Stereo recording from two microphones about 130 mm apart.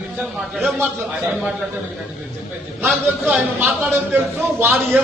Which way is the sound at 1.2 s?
5° right (ahead or behind).